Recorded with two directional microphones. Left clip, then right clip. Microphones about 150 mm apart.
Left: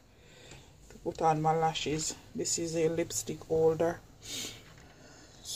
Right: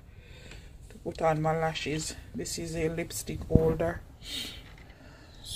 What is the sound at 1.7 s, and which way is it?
Speech, 15° left (ahead or behind).